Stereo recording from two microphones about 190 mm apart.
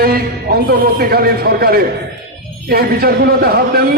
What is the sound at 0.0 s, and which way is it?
A man's voice, 50° right (ahead or behind).